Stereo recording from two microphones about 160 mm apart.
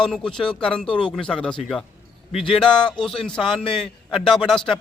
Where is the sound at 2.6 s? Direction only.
5° left (ahead or behind).